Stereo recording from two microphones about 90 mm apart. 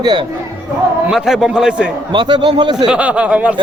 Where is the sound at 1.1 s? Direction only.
5° right (ahead or behind).